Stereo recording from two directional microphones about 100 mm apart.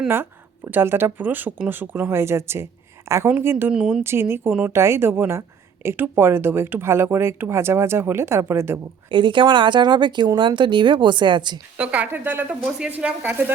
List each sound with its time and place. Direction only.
0.1 s speech: 20° right (ahead or behind)
3.7 s speech: 10° right (ahead or behind)
4.0 s speech: 25° right (ahead or behind)
9.0 s speech: 55° right (ahead or behind)
11.8 s speech: 15° right (ahead or behind)